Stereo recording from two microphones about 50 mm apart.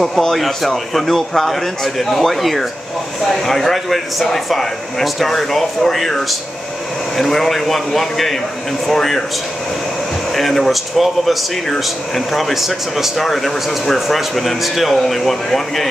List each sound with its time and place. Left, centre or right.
0.0 s speech: centre
10.3 s speech: centre